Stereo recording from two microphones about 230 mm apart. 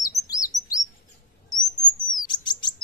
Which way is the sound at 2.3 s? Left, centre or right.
Centre.